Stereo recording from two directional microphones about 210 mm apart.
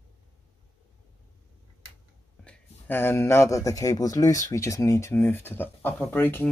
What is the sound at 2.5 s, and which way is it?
Speech, 10° left (ahead or behind).